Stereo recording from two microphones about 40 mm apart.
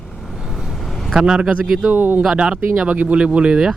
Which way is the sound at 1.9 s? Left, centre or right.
Right.